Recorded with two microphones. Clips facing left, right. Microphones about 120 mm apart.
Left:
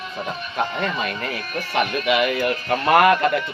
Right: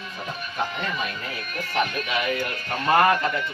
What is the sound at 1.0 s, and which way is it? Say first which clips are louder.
Speech: left 5 dB; 70° left (ahead or behind).